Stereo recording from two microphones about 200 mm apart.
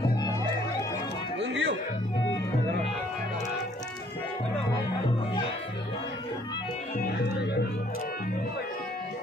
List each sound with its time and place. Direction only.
1.4 s music: 60° right (ahead or behind)